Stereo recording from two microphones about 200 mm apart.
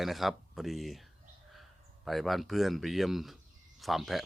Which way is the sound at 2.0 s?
Centre (ahead or behind).